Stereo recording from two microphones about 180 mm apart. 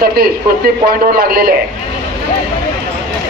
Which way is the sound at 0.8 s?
55° right (ahead or behind).